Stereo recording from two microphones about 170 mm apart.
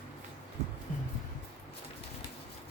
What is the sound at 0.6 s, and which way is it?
Heart murmur, 40° right (ahead or behind).